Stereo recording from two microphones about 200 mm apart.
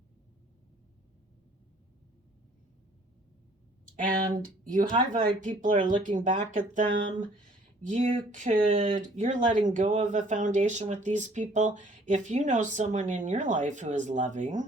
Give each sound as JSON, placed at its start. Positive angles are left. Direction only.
{"t": 4.2, "sound": "speech", "side_deg": -45}